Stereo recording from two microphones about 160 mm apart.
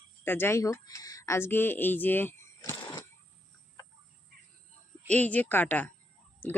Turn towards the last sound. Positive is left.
turn(degrees=10)  # may be behind; listen again after turning